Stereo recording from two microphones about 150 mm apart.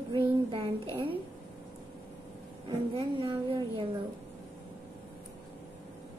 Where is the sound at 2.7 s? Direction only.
35° right (ahead or behind).